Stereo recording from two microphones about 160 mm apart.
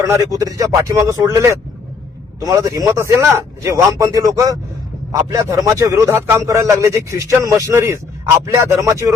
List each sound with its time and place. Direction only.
0.1 s a man's voice: 20° right (ahead or behind)